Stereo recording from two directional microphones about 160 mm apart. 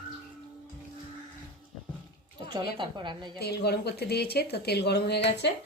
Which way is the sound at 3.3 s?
90° left.